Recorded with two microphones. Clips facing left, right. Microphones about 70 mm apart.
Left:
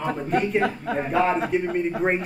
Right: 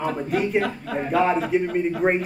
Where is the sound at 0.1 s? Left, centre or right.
Centre.